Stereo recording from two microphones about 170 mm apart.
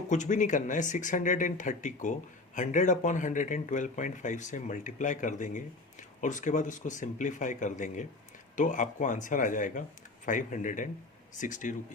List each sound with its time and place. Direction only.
0.1 s speech: 45° left (ahead or behind)